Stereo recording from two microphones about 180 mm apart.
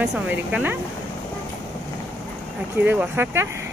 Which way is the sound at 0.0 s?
5° right (ahead or behind).